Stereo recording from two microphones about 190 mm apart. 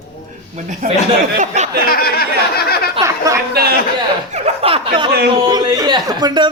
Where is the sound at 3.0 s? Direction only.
15° right (ahead or behind).